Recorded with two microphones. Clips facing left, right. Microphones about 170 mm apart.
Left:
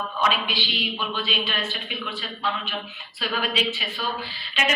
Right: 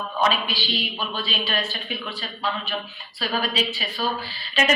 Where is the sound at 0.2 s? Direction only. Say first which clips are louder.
Right 3 dB; 40° right (ahead or behind).